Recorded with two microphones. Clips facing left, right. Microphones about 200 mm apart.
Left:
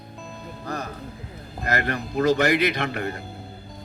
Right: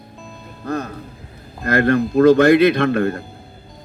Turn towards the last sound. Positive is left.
turn(degrees=-55)  # may be behind; listen again after turning